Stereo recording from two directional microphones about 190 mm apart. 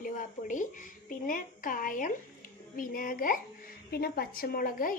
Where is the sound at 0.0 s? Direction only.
45° left (ahead or behind).